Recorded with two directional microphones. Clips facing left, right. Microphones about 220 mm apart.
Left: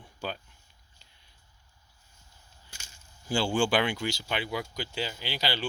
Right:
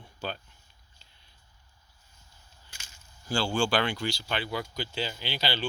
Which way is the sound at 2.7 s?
40° left (ahead or behind).